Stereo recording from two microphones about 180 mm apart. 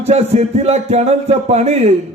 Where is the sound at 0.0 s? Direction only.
35° right (ahead or behind).